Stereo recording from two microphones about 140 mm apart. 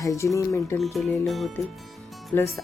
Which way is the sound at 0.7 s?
Centre (ahead or behind).